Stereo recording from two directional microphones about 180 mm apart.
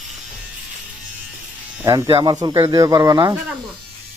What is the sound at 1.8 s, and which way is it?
Speech, 15° right (ahead or behind).